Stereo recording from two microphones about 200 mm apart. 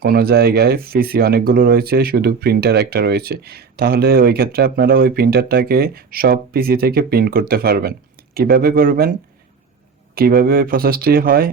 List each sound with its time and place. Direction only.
0.0 s speech: 50° right (ahead or behind)
10.2 s speech: 50° right (ahead or behind)